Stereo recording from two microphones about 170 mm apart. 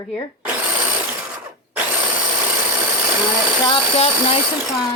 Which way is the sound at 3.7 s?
40° left (ahead or behind).